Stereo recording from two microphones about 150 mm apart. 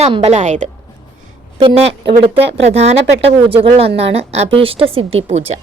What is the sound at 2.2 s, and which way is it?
A woman's voice, 40° right (ahead or behind).